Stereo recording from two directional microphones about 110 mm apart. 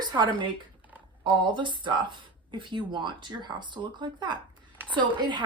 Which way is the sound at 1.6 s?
45° right (ahead or behind).